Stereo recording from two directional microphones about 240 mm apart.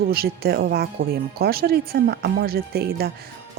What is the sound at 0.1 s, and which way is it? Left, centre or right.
Speech, right.